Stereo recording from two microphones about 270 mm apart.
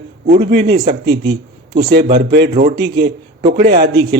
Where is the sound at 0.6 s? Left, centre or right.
Right.